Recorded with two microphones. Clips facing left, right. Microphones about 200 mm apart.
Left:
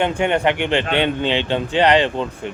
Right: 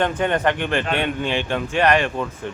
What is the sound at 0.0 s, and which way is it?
A man's voice, 15° left (ahead or behind).